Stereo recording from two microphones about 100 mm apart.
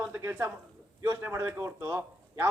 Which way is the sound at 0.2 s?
25° right (ahead or behind).